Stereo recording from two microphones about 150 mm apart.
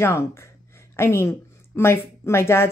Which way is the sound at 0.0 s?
20° left (ahead or behind).